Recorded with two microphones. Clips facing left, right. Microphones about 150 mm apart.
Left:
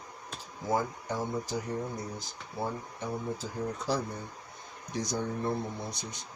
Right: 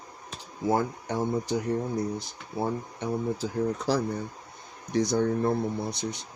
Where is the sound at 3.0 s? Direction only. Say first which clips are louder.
Right 6 dB; 70° right (ahead or behind).